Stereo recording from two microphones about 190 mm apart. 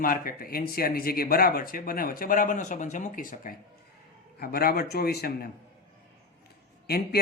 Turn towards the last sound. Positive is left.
turn(degrees=55)  # may be behind; listen again after turning